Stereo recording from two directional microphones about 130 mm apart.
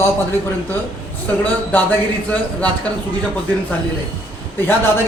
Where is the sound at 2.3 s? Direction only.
10° left (ahead or behind).